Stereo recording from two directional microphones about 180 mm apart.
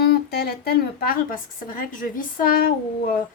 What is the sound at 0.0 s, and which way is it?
A woman's voice, 55° left (ahead or behind).